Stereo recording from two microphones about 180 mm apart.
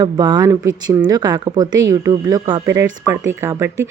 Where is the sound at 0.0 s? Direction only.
25° right (ahead or behind).